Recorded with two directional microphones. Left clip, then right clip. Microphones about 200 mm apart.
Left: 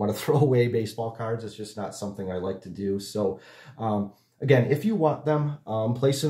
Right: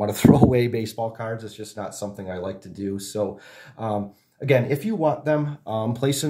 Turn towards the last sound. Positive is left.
turn(degrees=-40)  # may be behind; listen again after turning